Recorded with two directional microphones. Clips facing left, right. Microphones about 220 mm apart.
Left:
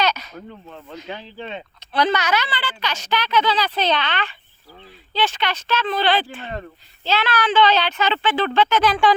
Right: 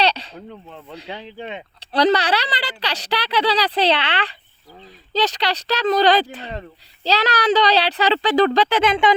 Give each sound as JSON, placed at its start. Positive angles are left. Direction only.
{"t": 0.0, "sound": "a sound", "side_deg": -30}
{"t": 1.0, "sound": "speech", "side_deg": -15}
{"t": 1.8, "sound": "a child's voice", "side_deg": -35}
{"t": 8.8, "sound": "speech", "side_deg": -20}